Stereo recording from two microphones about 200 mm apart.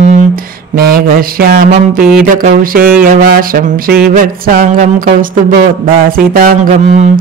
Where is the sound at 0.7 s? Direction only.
45° right (ahead or behind).